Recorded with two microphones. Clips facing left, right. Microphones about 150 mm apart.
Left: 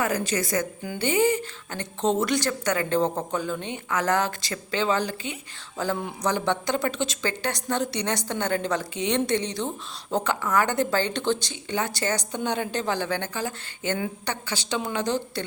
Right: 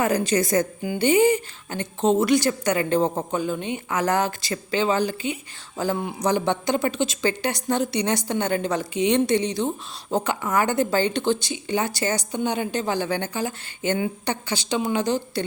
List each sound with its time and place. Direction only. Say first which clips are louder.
0.0 s a woman's voice: right 5 dB; 20° right (ahead or behind)